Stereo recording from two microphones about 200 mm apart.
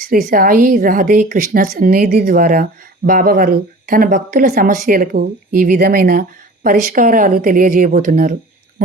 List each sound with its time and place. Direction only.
0.3 s speech: 45° right (ahead or behind)